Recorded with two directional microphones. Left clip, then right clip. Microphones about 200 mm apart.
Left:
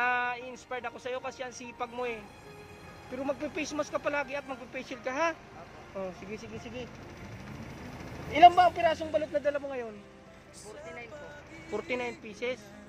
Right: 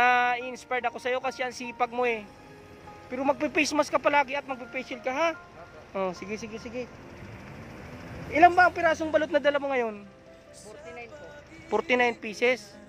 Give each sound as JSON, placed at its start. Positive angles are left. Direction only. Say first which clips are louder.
{"t": 0.0, "sound": "speech", "louder": "right 7 dB", "side_deg": -25}
{"t": 5.9, "sound": "speech", "louder": "right 8 dB", "side_deg": -45}
{"t": 8.3, "sound": "speech", "louder": "even", "side_deg": -35}
{"t": 11.7, "sound": "speech", "louder": "right 10 dB", "side_deg": -30}